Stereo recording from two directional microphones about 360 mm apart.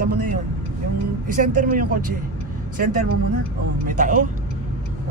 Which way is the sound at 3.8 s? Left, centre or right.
Right.